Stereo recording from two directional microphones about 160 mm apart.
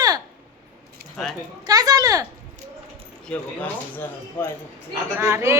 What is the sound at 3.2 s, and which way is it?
A woman's voice, 10° left (ahead or behind).